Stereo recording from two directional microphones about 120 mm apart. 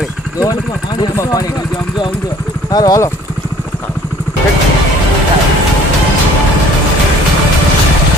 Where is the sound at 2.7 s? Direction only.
30° left (ahead or behind).